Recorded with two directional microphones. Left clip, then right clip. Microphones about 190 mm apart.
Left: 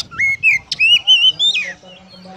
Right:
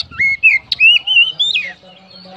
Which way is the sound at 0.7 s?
15° left (ahead or behind).